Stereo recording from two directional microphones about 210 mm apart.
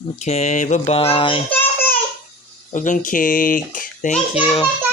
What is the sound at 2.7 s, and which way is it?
A child's voice, 40° left (ahead or behind).